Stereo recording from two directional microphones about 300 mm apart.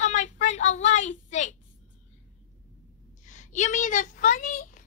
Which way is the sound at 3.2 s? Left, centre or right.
Left.